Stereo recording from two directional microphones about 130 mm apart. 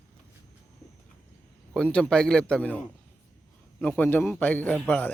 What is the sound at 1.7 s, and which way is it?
A man's voice, 5° left (ahead or behind).